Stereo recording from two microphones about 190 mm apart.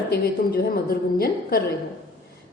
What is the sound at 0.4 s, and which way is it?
A woman's voice, 50° left (ahead or behind).